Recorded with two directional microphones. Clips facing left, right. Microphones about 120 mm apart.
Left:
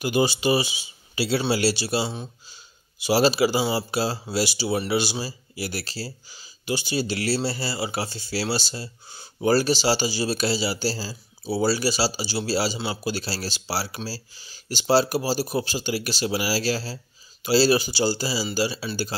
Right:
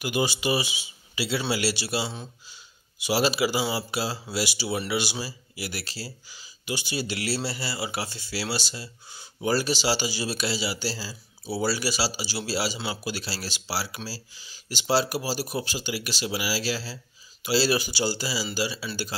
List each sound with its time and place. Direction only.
0.0 s speech: 30° left (ahead or behind)